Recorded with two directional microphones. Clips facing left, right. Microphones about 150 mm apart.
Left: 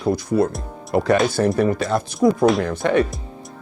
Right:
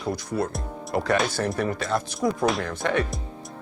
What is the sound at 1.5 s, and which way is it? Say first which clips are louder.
Speech: left 6 dB; 15° left (ahead or behind).